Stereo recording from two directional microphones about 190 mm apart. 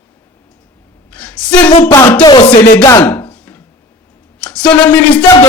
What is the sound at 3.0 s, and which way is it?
Chopping, 10° left (ahead or behind).